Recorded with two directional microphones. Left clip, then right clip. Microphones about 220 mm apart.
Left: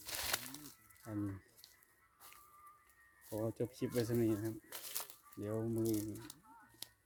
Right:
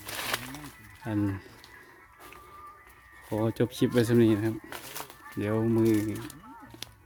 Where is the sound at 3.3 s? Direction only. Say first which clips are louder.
Right 12 dB; 15° right (ahead or behind).